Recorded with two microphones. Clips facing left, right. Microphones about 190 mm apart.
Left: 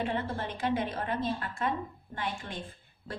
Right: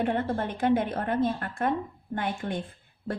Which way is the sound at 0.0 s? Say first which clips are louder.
Right 5 dB; 50° right (ahead or behind).